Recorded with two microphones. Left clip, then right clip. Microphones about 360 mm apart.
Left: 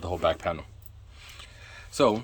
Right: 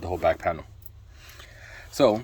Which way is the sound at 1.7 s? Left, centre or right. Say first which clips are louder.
Right 2 dB; left.